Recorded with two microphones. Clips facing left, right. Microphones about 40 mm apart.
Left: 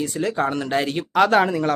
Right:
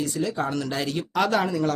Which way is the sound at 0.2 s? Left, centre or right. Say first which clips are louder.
Left 6 dB; left.